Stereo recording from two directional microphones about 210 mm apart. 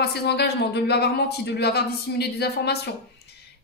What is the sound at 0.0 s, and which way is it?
A woman's voice, 50° left (ahead or behind).